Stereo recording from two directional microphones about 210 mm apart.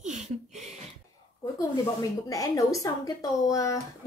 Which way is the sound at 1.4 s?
15° left (ahead or behind).